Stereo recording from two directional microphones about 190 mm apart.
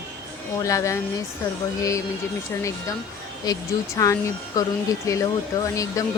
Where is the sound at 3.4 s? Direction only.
20° left (ahead or behind).